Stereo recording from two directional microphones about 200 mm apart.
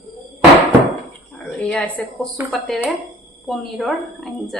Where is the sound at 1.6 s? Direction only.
5° left (ahead or behind).